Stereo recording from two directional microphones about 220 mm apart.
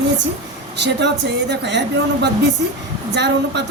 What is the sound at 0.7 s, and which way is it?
Speech, 50° right (ahead or behind).